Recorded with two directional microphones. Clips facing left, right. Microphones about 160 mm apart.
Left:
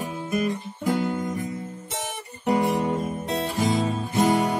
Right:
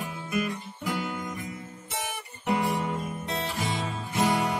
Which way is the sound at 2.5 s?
35° left (ahead or behind).